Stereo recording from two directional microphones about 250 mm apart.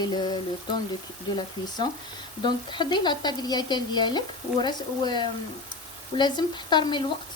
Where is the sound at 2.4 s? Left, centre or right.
Centre.